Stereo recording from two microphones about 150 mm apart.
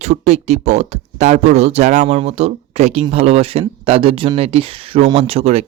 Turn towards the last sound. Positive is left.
turn(degrees=-40)  # may be behind; listen again after turning